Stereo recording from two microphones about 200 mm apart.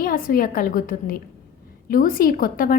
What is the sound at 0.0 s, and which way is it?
A woman's voice, 45° left (ahead or behind).